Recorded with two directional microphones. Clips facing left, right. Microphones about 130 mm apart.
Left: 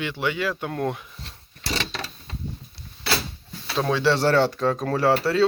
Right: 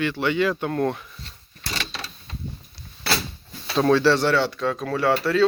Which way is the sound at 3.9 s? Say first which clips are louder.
Right 3 dB; 20° left (ahead or behind).